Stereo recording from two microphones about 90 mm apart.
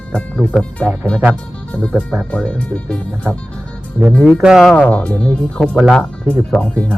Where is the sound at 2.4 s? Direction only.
10° left (ahead or behind).